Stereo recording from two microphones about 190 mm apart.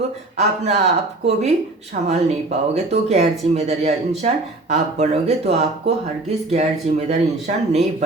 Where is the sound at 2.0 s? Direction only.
35° right (ahead or behind).